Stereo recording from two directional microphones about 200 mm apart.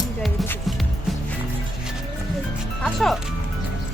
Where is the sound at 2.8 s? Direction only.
Centre (ahead or behind).